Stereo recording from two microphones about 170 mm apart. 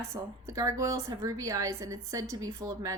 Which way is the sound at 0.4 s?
20° right (ahead or behind).